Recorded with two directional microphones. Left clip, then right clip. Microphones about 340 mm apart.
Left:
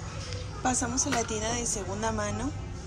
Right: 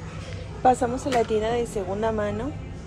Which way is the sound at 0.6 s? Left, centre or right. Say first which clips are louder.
Right 9 dB; centre.